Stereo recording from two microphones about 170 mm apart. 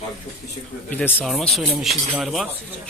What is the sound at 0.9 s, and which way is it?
Speech, 5° left (ahead or behind).